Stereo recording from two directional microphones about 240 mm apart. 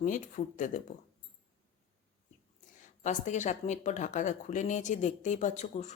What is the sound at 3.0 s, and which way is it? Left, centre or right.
Speech, left.